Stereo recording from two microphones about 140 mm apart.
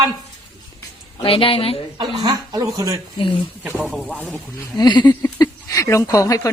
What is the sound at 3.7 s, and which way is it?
Speech, 15° right (ahead or behind).